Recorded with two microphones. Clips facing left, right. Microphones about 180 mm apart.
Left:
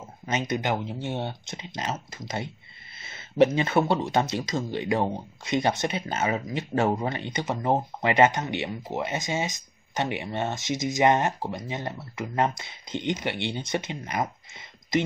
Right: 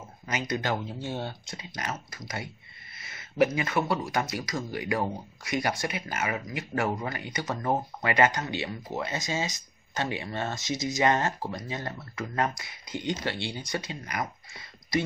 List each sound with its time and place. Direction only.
0.3 s speech: 20° left (ahead or behind)